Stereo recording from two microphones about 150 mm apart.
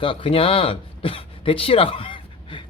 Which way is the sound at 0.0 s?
35° left (ahead or behind).